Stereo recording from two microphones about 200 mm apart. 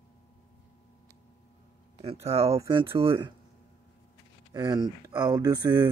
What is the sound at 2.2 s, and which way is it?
Speech, 30° right (ahead or behind).